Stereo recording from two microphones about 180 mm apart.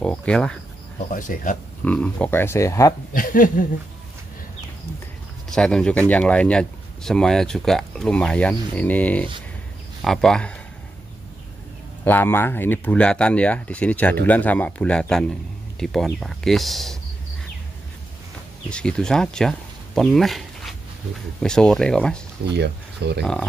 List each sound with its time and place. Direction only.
0.0 s speech: 5° left (ahead or behind)
1.1 s speech: 50° left (ahead or behind)
1.9 s speech: 5° left (ahead or behind)
3.2 s speech: 50° left (ahead or behind)
5.5 s speech: 5° left (ahead or behind)
12.0 s speech: 10° left (ahead or behind)
18.7 s speech: 5° left (ahead or behind)
22.4 s speech: 70° right (ahead or behind)